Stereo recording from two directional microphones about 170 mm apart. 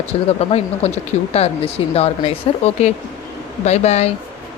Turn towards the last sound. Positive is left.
turn(degrees=40)  # may be behind; listen again after turning